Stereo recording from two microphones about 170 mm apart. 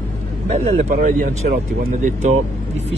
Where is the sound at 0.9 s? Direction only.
55° right (ahead or behind).